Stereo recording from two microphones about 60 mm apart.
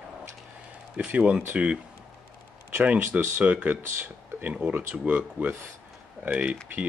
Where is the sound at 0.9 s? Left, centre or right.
Right.